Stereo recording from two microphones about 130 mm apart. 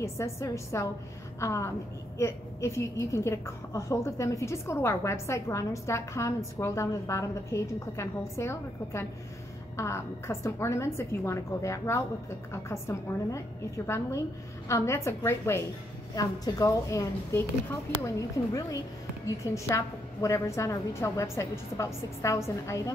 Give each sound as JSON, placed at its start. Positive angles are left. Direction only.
{"t": 0.0, "sound": "a woman's voice", "side_deg": 20}